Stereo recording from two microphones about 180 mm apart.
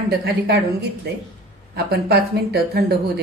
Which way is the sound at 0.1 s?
60° right (ahead or behind).